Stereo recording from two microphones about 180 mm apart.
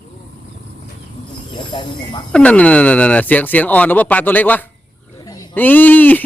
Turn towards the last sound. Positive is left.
turn(degrees=10)  # may be behind; listen again after turning